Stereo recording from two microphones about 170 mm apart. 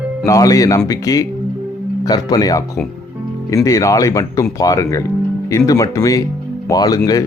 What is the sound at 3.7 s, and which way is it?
Speech, 20° left (ahead or behind).